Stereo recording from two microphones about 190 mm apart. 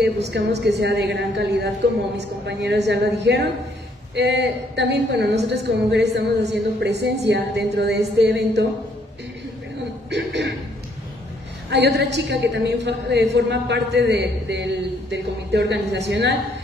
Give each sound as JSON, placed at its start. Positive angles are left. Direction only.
{"t": 0.0, "sound": "a woman's voice", "side_deg": -60}
{"t": 10.0, "sound": "a sound", "side_deg": -65}
{"t": 11.7, "sound": "a woman's voice", "side_deg": -60}